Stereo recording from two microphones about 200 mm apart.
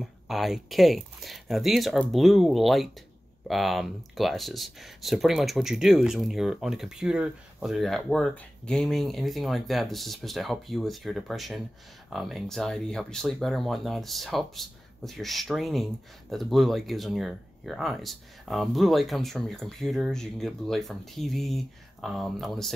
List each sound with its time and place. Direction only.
0.0 s speech: centre (ahead or behind)